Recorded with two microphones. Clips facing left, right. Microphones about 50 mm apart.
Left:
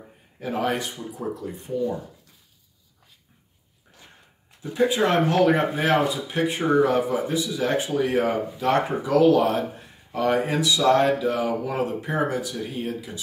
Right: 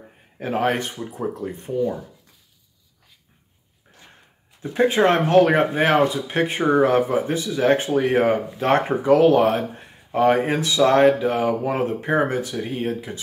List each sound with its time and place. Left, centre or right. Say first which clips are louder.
0.4 s speech: right 4 dB; right
4.6 s speech: right 3 dB; right